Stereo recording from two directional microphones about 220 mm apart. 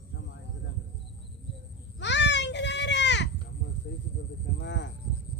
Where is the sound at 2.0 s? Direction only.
55° left (ahead or behind).